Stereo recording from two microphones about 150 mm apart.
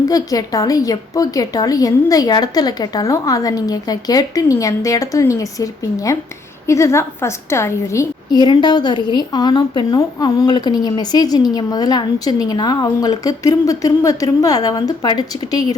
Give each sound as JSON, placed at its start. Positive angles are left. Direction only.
{"t": 0.1, "sound": "a woman's voice", "side_deg": 25}